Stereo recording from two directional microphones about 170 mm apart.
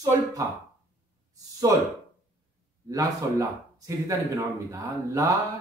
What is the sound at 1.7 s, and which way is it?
Speech, 20° right (ahead or behind).